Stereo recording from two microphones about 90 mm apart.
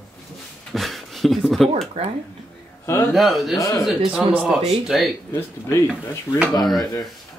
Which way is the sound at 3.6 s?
40° left (ahead or behind).